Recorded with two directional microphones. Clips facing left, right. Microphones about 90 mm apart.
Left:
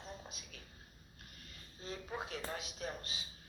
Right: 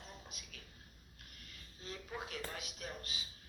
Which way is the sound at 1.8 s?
25° left (ahead or behind).